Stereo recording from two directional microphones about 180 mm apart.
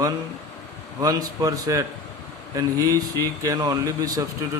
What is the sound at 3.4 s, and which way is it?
Speech, 20° right (ahead or behind).